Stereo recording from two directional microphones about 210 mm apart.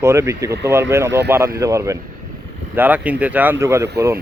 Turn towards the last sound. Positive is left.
turn(degrees=-15)  # may be behind; listen again after turning